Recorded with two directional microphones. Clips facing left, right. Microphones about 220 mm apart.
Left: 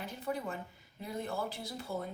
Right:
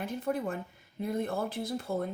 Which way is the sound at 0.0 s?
50° right (ahead or behind).